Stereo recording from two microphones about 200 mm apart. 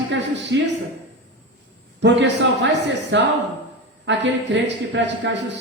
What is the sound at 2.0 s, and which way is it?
A woman's voice, 65° right (ahead or behind).